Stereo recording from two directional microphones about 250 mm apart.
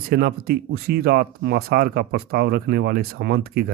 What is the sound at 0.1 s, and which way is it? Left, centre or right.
Speech, right.